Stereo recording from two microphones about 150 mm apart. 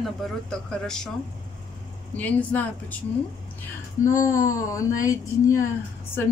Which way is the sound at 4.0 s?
20° left (ahead or behind).